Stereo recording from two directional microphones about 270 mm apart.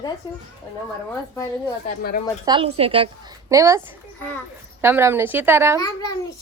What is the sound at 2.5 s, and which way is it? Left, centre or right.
A woman's voice, centre.